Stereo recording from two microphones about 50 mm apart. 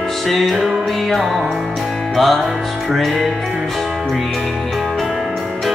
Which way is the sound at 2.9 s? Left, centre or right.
Centre.